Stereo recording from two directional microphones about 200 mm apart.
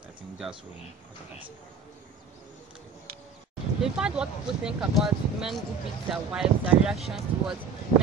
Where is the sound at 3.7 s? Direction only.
5° right (ahead or behind).